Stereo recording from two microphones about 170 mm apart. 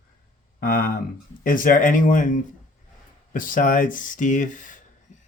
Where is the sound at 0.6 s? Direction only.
60° left (ahead or behind).